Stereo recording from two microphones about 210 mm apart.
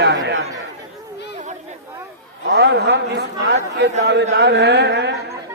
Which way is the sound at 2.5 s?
50° right (ahead or behind).